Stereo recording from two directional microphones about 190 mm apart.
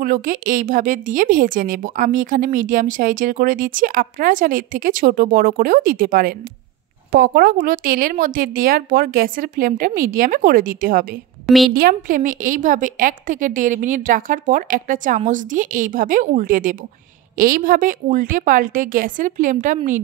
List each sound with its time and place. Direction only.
0.0 s a woman's voice: 45° right (ahead or behind)
11.4 s a woman's voice: centre (ahead or behind)
11.7 s a woman's voice: 50° right (ahead or behind)